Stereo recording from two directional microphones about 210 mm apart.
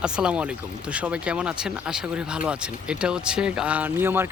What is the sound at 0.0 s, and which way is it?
Speech, 5° right (ahead or behind).